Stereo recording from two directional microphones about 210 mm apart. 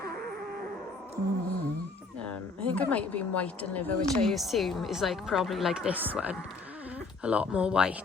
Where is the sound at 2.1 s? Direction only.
5° left (ahead or behind).